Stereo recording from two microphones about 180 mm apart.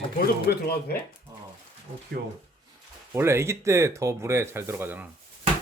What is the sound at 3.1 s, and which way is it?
Speech, 15° right (ahead or behind).